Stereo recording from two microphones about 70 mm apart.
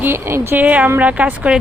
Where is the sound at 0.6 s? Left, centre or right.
Centre.